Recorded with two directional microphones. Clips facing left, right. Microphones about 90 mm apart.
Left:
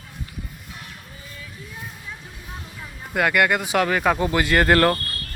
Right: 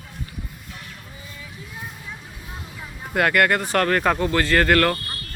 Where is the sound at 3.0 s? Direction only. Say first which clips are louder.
Right 1 dB; centre (ahead or behind).